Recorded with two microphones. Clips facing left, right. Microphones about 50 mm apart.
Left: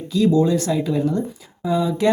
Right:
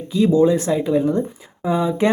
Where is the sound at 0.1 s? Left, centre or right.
Right.